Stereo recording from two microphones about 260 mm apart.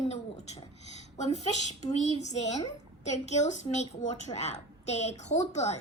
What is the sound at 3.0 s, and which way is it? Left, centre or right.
A woman's voice, left.